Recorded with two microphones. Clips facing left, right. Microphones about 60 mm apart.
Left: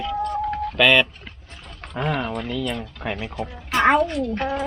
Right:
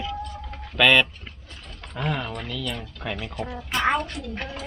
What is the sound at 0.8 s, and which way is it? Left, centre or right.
Speech, centre.